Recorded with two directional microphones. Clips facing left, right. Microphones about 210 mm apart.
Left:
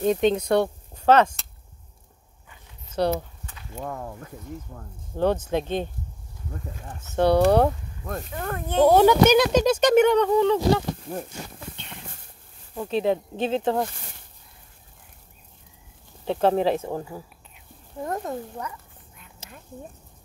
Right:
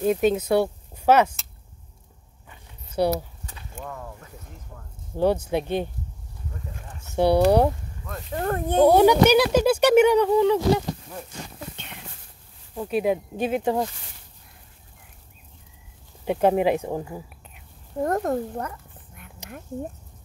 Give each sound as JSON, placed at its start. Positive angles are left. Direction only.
{"t": 0.0, "sound": "speech", "side_deg": -5}
{"t": 2.9, "sound": "speech", "side_deg": -10}
{"t": 3.8, "sound": "speech", "side_deg": 45}
{"t": 5.1, "sound": "speech", "side_deg": -10}
{"t": 7.2, "sound": "speech", "side_deg": -10}
{"t": 8.3, "sound": "speech", "side_deg": -40}
{"t": 8.7, "sound": "speech", "side_deg": -10}
{"t": 12.7, "sound": "speech", "side_deg": -10}
{"t": 16.3, "sound": "speech", "side_deg": -15}
{"t": 18.0, "sound": "speech", "side_deg": -50}